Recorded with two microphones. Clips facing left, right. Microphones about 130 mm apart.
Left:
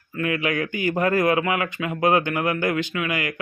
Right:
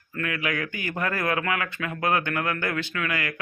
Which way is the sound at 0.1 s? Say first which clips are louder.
Left 5 dB; 20° left (ahead or behind).